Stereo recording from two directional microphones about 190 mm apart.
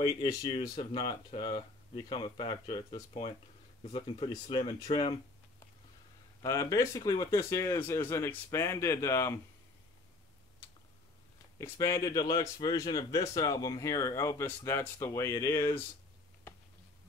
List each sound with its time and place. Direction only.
0.0 s speech: 20° left (ahead or behind)
6.4 s speech: 15° left (ahead or behind)
11.5 s speech: 15° left (ahead or behind)